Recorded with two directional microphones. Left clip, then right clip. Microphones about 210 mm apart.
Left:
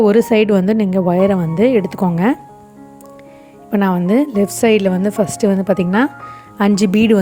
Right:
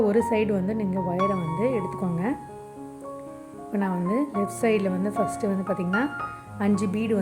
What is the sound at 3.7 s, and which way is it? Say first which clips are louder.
A woman's voice: left 11 dB; 40° left (ahead or behind).